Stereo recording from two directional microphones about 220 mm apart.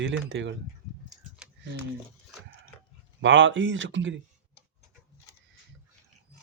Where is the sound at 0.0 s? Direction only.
55° right (ahead or behind).